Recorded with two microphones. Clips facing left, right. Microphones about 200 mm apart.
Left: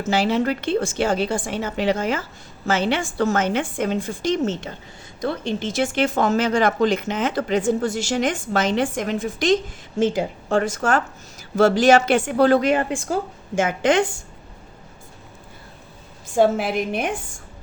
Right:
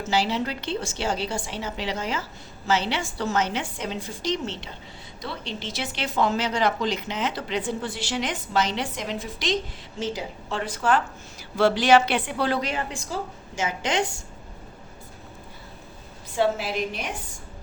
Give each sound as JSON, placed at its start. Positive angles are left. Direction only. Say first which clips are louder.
{"t": 0.0, "sound": "speech", "louder": "left 5 dB", "side_deg": 50}
{"t": 16.3, "sound": "speech", "louder": "left 6 dB", "side_deg": 50}